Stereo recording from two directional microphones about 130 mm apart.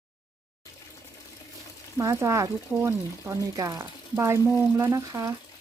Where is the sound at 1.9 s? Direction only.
25° right (ahead or behind).